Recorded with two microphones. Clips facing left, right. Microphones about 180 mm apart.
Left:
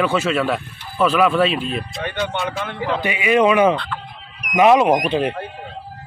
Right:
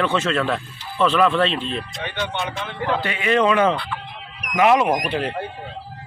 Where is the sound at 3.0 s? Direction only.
10° left (ahead or behind).